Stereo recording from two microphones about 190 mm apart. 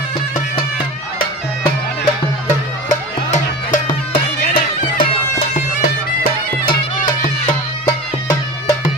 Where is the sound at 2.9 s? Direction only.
40° left (ahead or behind).